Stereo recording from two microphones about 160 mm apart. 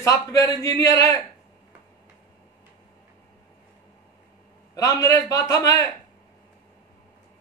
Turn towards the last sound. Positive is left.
turn(degrees=20)  # may be behind; listen again after turning